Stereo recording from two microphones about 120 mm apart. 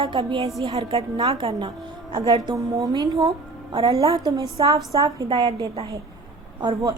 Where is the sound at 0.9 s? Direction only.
45° right (ahead or behind).